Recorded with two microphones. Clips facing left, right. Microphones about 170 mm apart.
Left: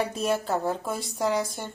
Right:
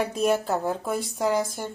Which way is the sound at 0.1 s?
10° right (ahead or behind).